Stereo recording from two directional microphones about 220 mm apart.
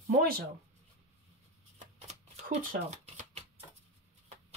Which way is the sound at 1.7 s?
30° right (ahead or behind).